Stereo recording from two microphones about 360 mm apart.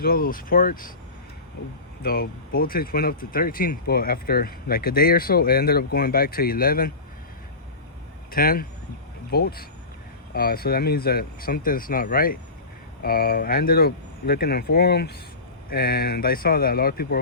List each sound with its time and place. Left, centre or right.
0.0 s speech: left
2.0 s speech: left
8.3 s speech: left